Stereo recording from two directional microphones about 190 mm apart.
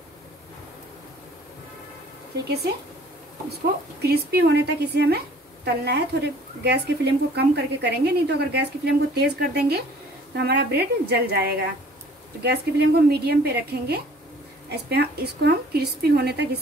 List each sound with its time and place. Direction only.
4.0 s a woman's voice: 55° right (ahead or behind)